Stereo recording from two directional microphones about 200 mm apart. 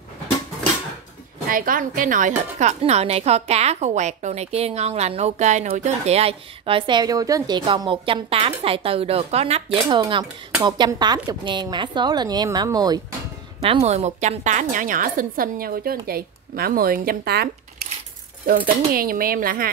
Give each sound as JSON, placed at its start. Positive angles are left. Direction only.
{"t": 1.5, "sound": "a woman's voice", "side_deg": -45}
{"t": 18.7, "sound": "speech", "side_deg": -45}